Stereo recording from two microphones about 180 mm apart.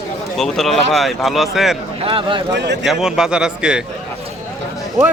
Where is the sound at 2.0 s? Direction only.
30° right (ahead or behind).